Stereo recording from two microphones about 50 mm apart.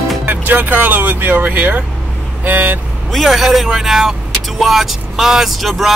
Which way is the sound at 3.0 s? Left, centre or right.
Centre.